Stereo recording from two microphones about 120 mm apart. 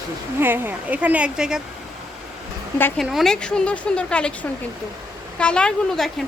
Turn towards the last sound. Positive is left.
turn(degrees=5)  # may be behind; listen again after turning